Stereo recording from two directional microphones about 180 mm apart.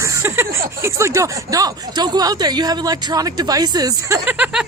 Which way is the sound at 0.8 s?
15° right (ahead or behind).